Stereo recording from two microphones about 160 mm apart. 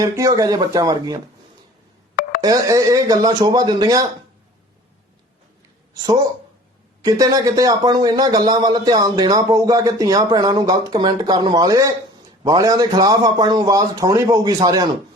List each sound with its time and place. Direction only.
0.0 s speech: 20° right (ahead or behind)
2.4 s speech: 20° right (ahead or behind)
7.0 s speech: 25° right (ahead or behind)